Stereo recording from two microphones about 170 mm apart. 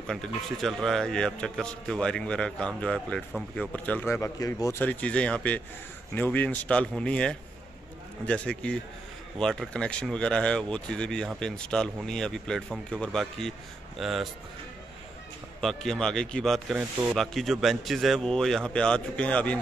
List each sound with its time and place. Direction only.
0.0 s a man's voice: 5° left (ahead or behind)
15.6 s a man's voice: centre (ahead or behind)